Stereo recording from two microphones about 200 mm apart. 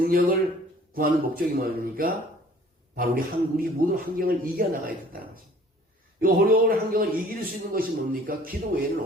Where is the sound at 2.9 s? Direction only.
45° right (ahead or behind).